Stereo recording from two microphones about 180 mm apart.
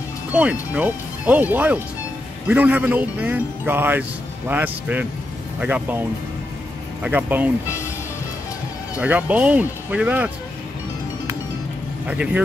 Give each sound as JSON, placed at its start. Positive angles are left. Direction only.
{"t": 0.3, "sound": "speech", "side_deg": -5}
{"t": 9.0, "sound": "speech", "side_deg": -10}